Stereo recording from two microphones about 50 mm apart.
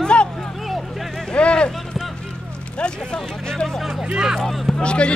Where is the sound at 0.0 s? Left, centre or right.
Left.